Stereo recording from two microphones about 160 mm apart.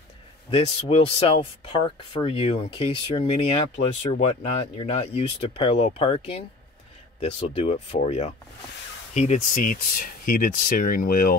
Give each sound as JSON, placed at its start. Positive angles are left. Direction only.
{"t": 0.5, "sound": "speech", "side_deg": 35}